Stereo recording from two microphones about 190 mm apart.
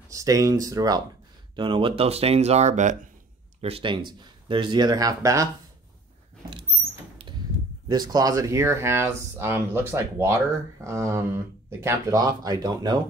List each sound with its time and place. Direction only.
0.1 s speech: 15° right (ahead or behind); by 3.0 s 40° right (ahead or behind)
3.6 s speech: 30° right (ahead or behind)
7.9 s speech: 20° right (ahead or behind)